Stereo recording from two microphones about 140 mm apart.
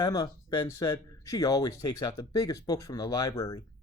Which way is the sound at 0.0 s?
30° left (ahead or behind).